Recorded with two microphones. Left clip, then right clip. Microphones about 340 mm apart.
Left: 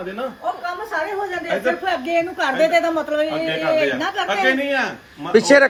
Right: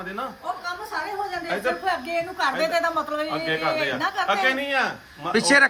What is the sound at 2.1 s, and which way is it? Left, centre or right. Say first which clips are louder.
A woman's voice: left 5 dB; centre.